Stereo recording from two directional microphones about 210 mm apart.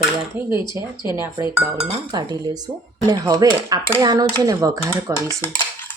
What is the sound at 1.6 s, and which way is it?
Speech, 20° right (ahead or behind).